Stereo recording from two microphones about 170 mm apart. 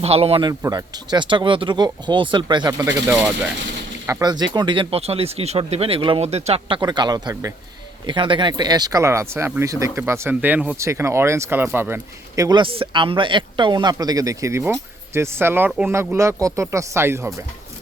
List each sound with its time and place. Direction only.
0.0 s speech: 35° right (ahead or behind)
0.6 s speech: 20° right (ahead or behind)
4.0 s speech: 20° right (ahead or behind)